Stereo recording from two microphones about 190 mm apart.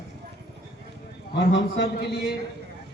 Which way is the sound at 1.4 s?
70° left (ahead or behind).